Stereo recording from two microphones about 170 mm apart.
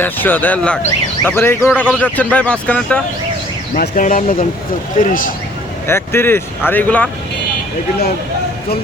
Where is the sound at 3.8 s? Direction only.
50° left (ahead or behind).